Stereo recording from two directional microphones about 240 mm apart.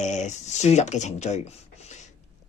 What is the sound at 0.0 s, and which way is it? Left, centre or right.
A man's voice, left.